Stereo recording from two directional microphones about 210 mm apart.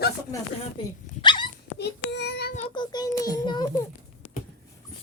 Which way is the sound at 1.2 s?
20° left (ahead or behind).